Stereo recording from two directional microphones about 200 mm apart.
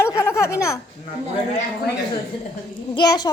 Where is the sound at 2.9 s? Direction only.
20° left (ahead or behind).